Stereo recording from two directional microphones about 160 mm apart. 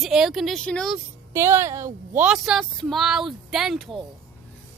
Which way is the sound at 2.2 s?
5° right (ahead or behind).